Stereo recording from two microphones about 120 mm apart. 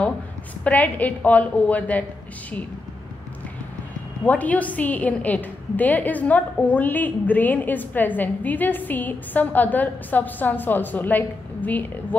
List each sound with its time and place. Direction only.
0.7 s a woman's voice: 15° left (ahead or behind)
4.2 s a woman's voice: 10° left (ahead or behind)